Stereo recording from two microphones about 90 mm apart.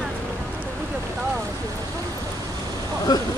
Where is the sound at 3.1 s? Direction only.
50° left (ahead or behind).